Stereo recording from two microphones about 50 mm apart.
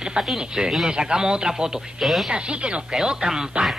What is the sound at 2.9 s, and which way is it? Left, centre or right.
Speech, centre.